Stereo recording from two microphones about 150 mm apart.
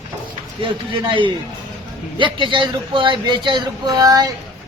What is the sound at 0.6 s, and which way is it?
Speech, 35° right (ahead or behind).